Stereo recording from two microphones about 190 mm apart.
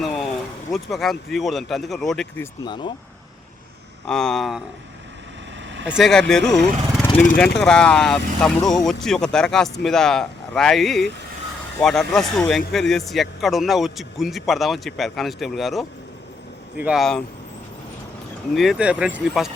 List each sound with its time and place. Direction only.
0.7 s speech: centre (ahead or behind)
2.6 s speech: 25° left (ahead or behind)
4.0 s speech: 5° left (ahead or behind)
5.6 s vehicle: 75° right (ahead or behind)
6.0 s speech: centre (ahead or behind)
18.5 s speech: centre (ahead or behind)